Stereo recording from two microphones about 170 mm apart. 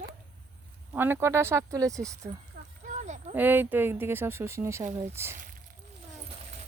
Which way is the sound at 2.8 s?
45° right (ahead or behind).